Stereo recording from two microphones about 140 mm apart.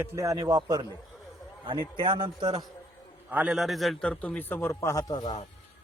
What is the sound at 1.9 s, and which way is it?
Speech, 35° right (ahead or behind).